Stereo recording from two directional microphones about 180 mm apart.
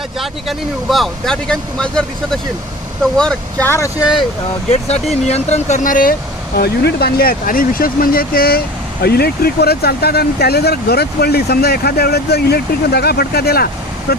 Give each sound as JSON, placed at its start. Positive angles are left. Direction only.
{"t": 0.2, "sound": "speech", "side_deg": 0}
{"t": 5.3, "sound": "speech", "side_deg": 40}
{"t": 6.6, "sound": "speech", "side_deg": 60}